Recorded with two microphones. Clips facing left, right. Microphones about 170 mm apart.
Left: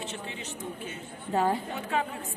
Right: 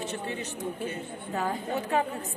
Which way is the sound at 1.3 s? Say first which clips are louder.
Left 5 dB; 30° left (ahead or behind).